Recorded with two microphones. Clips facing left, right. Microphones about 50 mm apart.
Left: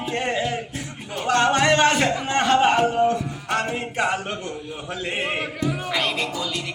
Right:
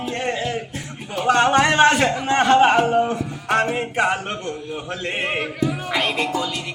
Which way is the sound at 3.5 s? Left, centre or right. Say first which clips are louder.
Right 5 dB; right.